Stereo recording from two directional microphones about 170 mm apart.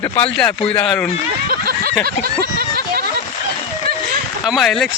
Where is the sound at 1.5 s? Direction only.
60° right (ahead or behind).